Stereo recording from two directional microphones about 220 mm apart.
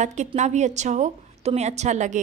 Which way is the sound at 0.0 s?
30° right (ahead or behind).